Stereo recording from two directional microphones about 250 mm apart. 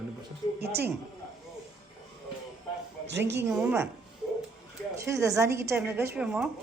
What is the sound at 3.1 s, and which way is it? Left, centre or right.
Speech, right.